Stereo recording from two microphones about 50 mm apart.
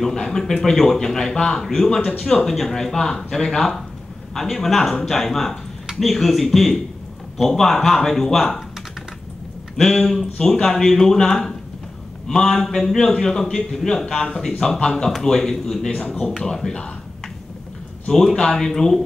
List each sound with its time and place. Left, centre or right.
0.0 s a man's voice: centre
9.8 s a man's voice: centre
18.0 s a man's voice: centre